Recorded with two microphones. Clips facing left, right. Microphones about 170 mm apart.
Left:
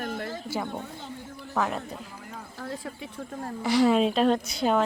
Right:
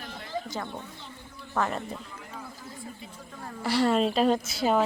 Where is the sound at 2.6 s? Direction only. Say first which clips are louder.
Left 6 dB; 70° left (ahead or behind).